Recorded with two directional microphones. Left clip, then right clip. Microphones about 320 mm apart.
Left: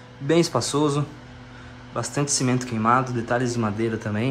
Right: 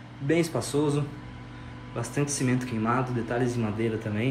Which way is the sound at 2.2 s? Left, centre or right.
Centre.